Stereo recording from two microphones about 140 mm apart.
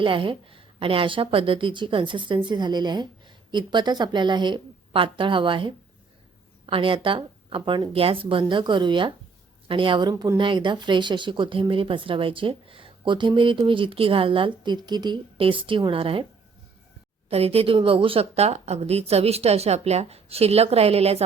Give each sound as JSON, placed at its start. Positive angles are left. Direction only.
{"t": 0.0, "sound": "speech", "side_deg": -35}
{"t": 17.2, "sound": "speech", "side_deg": -45}